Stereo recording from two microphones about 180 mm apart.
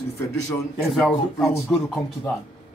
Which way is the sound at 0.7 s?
Centre (ahead or behind).